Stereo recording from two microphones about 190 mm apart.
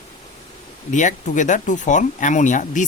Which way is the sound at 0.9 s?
40° left (ahead or behind).